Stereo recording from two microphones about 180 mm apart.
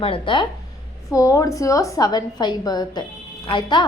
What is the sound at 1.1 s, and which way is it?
A woman's voice, 20° left (ahead or behind).